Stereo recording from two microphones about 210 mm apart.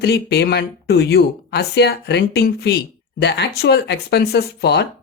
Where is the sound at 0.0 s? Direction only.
50° left (ahead or behind).